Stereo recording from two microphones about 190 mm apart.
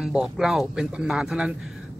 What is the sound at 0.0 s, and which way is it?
Speech, 5° right (ahead or behind).